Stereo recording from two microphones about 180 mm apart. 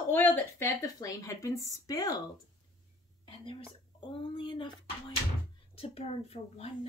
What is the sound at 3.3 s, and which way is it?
A woman's voice, 30° left (ahead or behind).